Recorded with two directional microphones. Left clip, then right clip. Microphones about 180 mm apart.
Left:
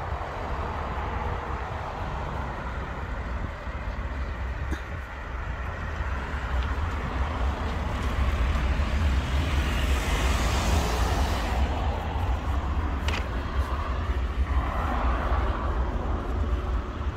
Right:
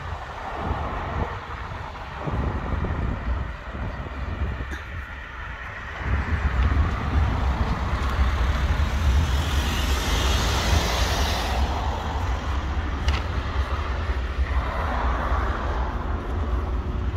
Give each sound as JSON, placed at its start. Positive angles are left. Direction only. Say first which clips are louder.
{"t": 9.5, "sound": "vehicle", "louder": "right 3 dB", "side_deg": -60}
{"t": 14.8, "sound": "vehicle", "louder": "right 3 dB", "side_deg": -50}